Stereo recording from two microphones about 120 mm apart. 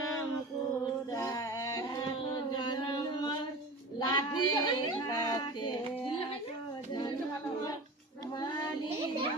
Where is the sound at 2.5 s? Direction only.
40° left (ahead or behind).